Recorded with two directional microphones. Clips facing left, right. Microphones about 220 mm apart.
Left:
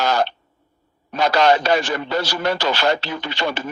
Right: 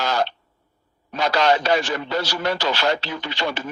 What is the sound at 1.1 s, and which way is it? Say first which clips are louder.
A man's voice: left 3 dB; 55° left (ahead or behind).